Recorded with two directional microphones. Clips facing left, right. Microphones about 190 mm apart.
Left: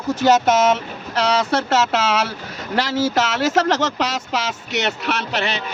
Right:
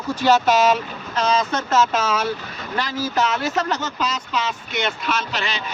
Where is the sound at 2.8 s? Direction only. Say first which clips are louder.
Left 4 dB; 90° left.